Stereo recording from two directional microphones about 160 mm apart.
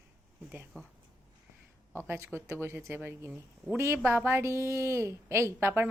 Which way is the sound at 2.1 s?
15° right (ahead or behind).